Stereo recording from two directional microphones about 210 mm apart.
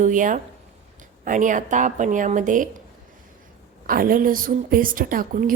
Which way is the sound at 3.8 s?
40° right (ahead or behind).